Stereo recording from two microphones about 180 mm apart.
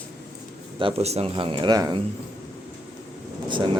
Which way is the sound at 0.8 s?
30° right (ahead or behind).